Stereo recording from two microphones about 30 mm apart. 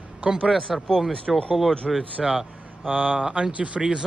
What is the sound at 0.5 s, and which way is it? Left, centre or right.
Speech, centre.